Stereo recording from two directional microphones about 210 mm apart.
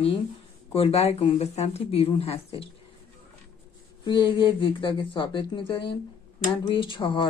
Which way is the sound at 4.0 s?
20° left (ahead or behind).